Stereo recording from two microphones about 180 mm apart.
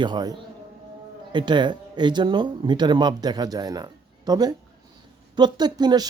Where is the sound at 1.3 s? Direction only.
25° right (ahead or behind).